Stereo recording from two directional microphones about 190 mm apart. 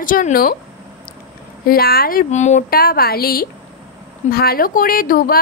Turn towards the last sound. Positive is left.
turn(degrees=50)  # may be behind; listen again after turning